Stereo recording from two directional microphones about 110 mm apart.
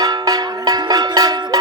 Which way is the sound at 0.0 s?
35° right (ahead or behind).